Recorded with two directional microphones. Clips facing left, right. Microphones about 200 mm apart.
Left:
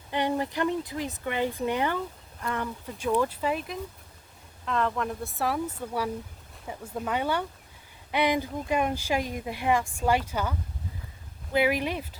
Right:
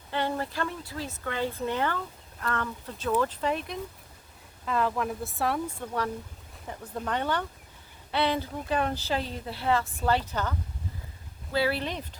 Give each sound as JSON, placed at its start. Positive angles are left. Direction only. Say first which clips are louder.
{"t": 0.1, "sound": "speech", "louder": "left 3 dB", "side_deg": 15}
{"t": 11.5, "sound": "speech", "louder": "left 3 dB", "side_deg": 15}